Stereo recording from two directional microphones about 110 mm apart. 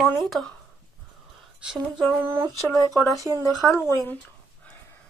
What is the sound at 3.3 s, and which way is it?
Speech, 20° right (ahead or behind).